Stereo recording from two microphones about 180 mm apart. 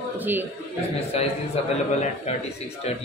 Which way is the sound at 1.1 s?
35° left (ahead or behind).